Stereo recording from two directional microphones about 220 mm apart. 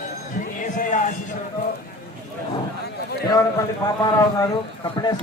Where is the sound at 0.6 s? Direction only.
35° left (ahead or behind).